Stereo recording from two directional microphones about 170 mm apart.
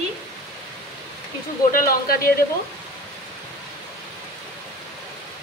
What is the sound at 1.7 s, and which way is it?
Speech, 60° left (ahead or behind).